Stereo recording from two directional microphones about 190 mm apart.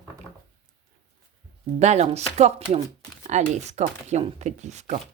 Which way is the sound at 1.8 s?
35° right (ahead or behind).